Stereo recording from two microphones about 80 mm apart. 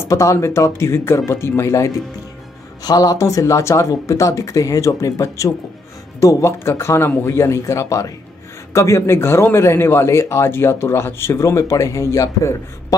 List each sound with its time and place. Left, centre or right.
0.1 s speech: left
2.8 s speech: left